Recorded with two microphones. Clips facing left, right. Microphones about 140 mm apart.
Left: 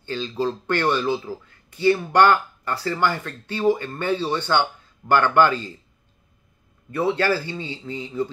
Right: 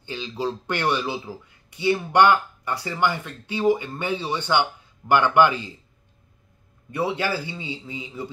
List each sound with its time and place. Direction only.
0.0 s speech: 15° right (ahead or behind)
6.9 s speech: 10° right (ahead or behind)